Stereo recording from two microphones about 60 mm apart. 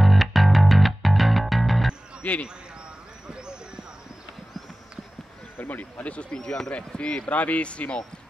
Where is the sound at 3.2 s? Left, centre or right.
Centre.